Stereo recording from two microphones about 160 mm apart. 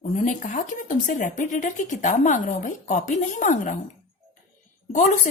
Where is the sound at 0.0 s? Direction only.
50° left (ahead or behind).